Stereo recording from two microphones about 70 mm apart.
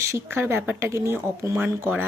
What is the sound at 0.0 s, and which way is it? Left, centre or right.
Speech, right.